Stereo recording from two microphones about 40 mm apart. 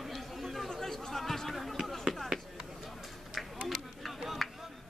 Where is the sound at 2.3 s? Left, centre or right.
Right.